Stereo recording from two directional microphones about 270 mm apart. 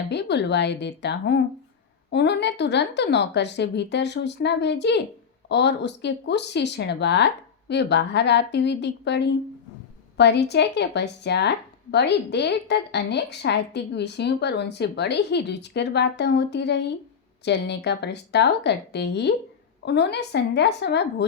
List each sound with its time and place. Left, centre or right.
0.1 s speech: left